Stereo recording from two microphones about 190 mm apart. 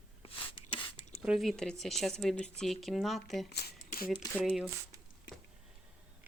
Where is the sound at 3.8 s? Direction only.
50° left (ahead or behind).